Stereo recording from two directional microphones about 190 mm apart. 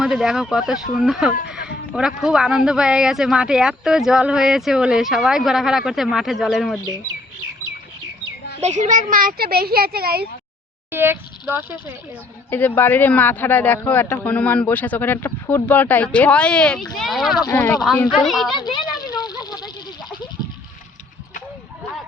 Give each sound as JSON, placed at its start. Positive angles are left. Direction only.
{"t": 0.0, "sound": "speech", "side_deg": 0}
{"t": 8.6, "sound": "speech", "side_deg": -40}
{"t": 10.9, "sound": "speech", "side_deg": -10}
{"t": 12.5, "sound": "speech", "side_deg": 10}
{"t": 18.5, "sound": "goat", "side_deg": 25}